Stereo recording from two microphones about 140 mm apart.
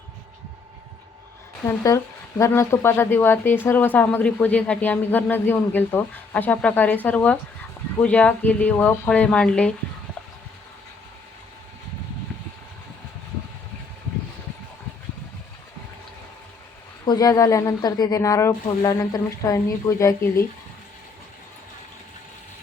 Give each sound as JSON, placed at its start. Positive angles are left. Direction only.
{"t": 1.6, "sound": "speech", "side_deg": 20}
{"t": 17.1, "sound": "speech", "side_deg": 25}